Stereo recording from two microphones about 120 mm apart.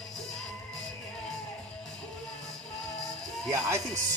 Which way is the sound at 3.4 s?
30° right (ahead or behind).